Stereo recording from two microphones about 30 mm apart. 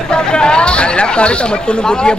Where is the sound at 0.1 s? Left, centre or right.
Left.